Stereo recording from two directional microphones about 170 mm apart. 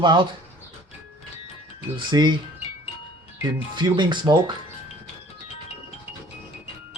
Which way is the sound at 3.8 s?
25° right (ahead or behind).